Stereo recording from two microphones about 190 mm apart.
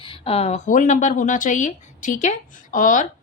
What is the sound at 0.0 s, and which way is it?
Speech, 30° left (ahead or behind).